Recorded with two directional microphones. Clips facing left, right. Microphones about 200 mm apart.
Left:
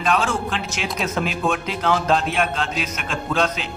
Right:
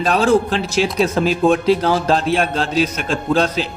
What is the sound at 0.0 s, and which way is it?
A man's voice, 35° right (ahead or behind).